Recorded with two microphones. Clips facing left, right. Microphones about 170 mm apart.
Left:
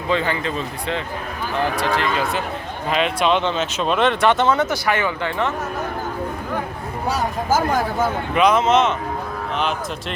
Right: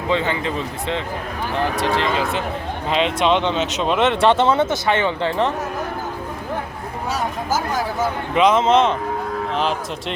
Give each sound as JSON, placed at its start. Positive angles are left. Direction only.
{"t": 0.1, "sound": "speech", "side_deg": -20}
{"t": 8.4, "sound": "speech", "side_deg": -25}